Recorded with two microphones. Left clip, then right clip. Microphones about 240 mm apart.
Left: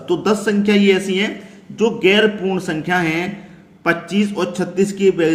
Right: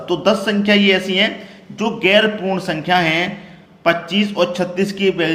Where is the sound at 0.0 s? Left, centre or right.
Centre.